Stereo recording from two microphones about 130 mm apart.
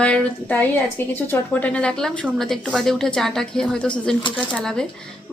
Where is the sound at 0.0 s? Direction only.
10° left (ahead or behind).